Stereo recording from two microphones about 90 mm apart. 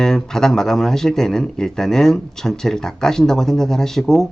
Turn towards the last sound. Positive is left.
turn(degrees=5)  # may be behind; listen again after turning